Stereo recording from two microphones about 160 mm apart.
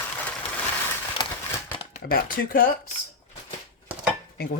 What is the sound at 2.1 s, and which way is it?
Speech, 65° left (ahead or behind).